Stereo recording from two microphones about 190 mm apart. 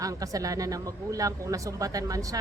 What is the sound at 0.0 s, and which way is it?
Speech, 20° right (ahead or behind).